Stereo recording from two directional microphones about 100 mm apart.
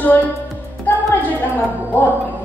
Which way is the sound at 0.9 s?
20° left (ahead or behind).